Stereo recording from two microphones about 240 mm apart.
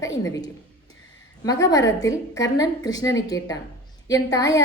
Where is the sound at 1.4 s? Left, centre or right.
Centre.